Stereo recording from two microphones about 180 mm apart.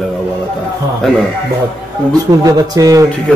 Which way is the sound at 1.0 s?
5° left (ahead or behind).